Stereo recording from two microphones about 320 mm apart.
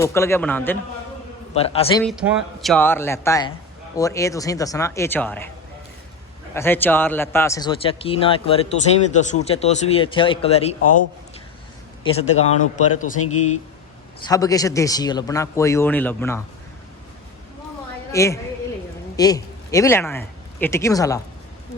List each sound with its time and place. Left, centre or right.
0.0 s a man's voice: centre
1.5 s a man's voice: centre
2.0 s a man's voice: centre
6.5 s a man's voice: centre
12.0 s speech: centre
14.3 s a man's voice: centre
18.1 s a woman's voice: centre